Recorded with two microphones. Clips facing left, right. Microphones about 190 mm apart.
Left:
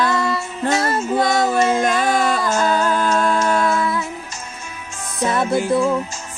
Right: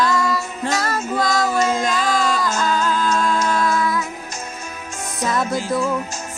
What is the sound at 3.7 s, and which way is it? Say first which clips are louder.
Humming: left 1 dB; 30° left (ahead or behind).